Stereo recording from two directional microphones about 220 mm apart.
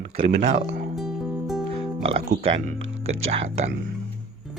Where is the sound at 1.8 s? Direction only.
25° right (ahead or behind).